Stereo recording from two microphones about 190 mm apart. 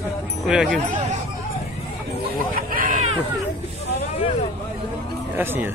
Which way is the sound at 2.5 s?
45° right (ahead or behind).